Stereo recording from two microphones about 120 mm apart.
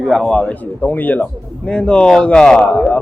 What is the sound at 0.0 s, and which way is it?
A man's voice, 5° left (ahead or behind).